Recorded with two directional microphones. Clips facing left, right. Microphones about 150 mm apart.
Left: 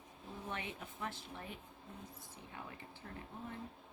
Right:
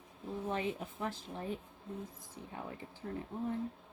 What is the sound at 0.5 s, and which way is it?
Speech, 35° right (ahead or behind).